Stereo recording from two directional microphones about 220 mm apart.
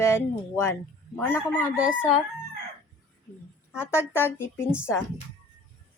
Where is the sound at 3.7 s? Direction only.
10° left (ahead or behind).